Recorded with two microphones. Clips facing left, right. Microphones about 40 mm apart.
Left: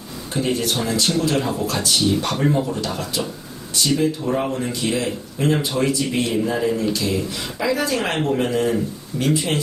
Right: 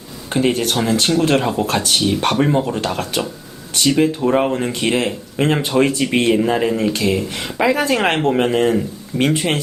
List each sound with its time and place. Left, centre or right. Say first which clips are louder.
0.3 s speech: right 5 dB; right